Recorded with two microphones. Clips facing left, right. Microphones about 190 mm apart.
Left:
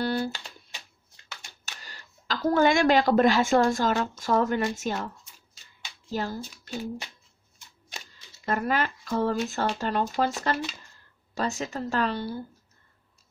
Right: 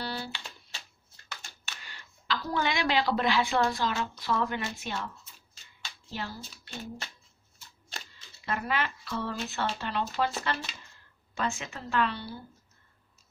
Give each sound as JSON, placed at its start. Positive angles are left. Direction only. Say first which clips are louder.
{"t": 0.0, "sound": "a sound", "louder": "left 9 dB", "side_deg": 45}
{"t": 1.7, "sound": "speech", "louder": "left 2 dB", "side_deg": 40}
{"t": 6.7, "sound": "speech", "louder": "left 7 dB", "side_deg": 10}
{"t": 8.5, "sound": "speech", "louder": "left 5 dB", "side_deg": 45}